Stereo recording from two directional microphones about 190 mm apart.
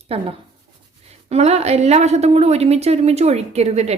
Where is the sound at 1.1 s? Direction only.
35° right (ahead or behind).